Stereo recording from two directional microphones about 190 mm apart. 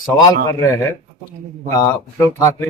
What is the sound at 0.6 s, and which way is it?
Speech, 15° left (ahead or behind).